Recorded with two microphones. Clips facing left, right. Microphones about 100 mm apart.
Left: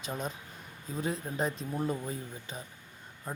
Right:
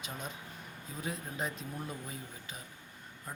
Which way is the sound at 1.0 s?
35° left (ahead or behind).